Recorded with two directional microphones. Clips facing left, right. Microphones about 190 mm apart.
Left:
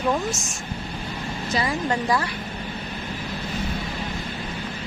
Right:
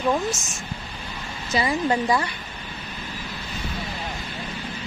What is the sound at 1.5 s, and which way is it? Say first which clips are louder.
Speech: right 3 dB; centre (ahead or behind).